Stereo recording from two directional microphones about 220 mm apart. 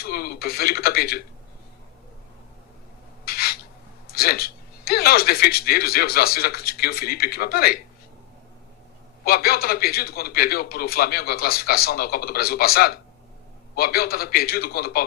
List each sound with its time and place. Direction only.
0.0 s speech: 45° left (ahead or behind)
3.2 s a sound: 45° left (ahead or behind)
4.0 s speech: 45° left (ahead or behind)
9.2 s speech: 45° left (ahead or behind)